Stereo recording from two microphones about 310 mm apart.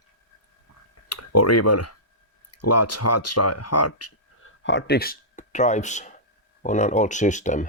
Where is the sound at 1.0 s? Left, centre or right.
Left.